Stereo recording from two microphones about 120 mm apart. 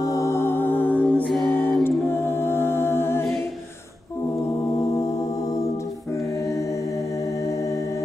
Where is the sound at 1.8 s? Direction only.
20° left (ahead or behind).